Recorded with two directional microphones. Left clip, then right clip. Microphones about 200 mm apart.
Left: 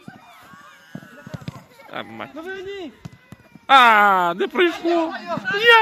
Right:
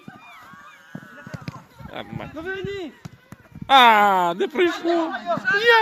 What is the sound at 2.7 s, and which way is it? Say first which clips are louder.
Speech: right 1 dB; 45° right (ahead or behind).